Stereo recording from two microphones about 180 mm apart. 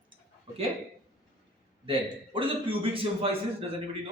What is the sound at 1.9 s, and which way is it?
A man's voice, 30° right (ahead or behind).